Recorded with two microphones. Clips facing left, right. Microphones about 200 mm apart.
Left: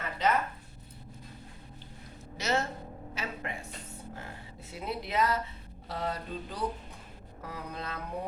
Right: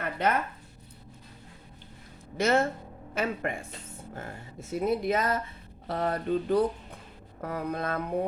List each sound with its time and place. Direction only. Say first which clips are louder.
0.0 s zipper: right 2 dB; 55° right (ahead or behind)
2.4 s speech: right 7 dB; 55° right (ahead or behind)